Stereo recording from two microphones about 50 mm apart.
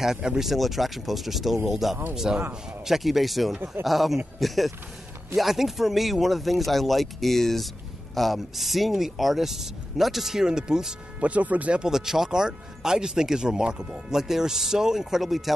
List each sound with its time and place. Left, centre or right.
0.0 s speech: centre
0.5 s speech: centre
11.1 s speech: right
11.8 s speech: centre